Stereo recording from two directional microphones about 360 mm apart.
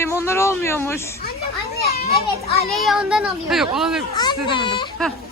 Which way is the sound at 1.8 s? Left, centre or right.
Left.